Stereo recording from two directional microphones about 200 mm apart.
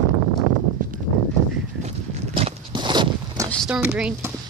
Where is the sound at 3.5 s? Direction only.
Centre (ahead or behind).